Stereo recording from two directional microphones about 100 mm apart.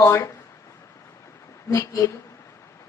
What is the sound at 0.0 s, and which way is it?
Speech, 25° left (ahead or behind).